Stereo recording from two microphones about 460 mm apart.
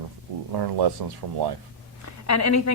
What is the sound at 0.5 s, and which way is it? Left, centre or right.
Speech, right.